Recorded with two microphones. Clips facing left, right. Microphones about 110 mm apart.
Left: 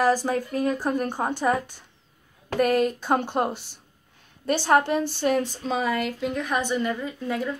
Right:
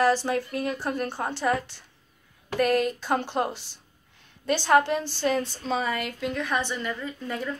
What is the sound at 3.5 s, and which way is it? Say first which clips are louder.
Speech: left 4 dB; 50° left (ahead or behind).